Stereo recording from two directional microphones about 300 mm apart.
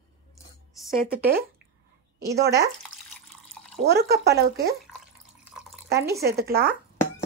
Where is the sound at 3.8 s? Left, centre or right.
Right.